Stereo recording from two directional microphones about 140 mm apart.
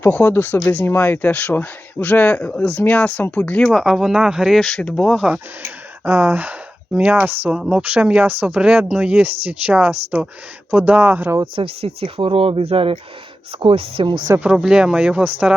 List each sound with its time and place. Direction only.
0.0 s speech: 15° left (ahead or behind)
3.7 s speech: centre (ahead or behind)
6.1 s speech: 15° right (ahead or behind)
11.5 s speech: 45° right (ahead or behind)
14.3 s speech: 5° right (ahead or behind)